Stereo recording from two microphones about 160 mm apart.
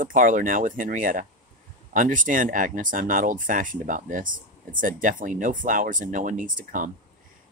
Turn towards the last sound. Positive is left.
turn(degrees=-55)  # may be behind; listen again after turning